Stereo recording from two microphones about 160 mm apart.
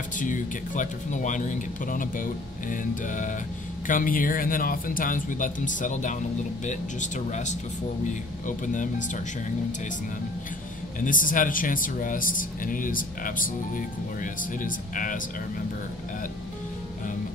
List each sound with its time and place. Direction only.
0.2 s speech: 55° left (ahead or behind)
11.1 s speech: 55° left (ahead or behind)